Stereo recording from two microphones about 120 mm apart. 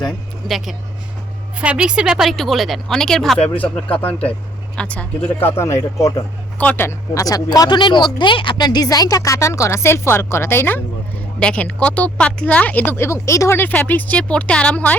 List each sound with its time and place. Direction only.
0.0 s speech: centre (ahead or behind)
5.5 s speech: 25° left (ahead or behind)
6.6 s speech: 15° left (ahead or behind)
11.3 s speech: 10° left (ahead or behind)